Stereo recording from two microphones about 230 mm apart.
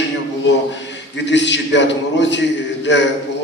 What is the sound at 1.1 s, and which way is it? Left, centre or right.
A man's voice, left.